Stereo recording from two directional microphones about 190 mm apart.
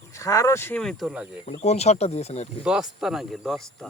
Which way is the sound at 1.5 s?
35° left (ahead or behind).